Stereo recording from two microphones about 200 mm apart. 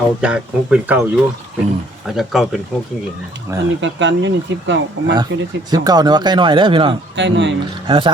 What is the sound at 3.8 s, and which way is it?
Speech, 65° right (ahead or behind).